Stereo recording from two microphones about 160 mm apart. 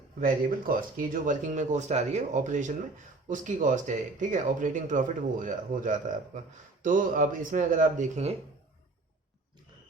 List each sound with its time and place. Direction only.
0.2 s speech: 60° right (ahead or behind); by 8.4 s 45° right (ahead or behind)